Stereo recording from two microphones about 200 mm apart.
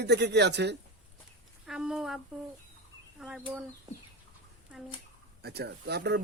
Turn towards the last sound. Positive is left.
turn(degrees=-55)  # may be behind; listen again after turning